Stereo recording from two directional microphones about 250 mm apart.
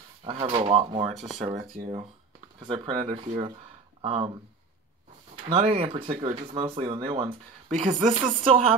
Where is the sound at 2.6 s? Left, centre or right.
Right.